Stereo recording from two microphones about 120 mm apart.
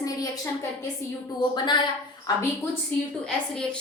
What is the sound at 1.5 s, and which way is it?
Speech, 40° left (ahead or behind).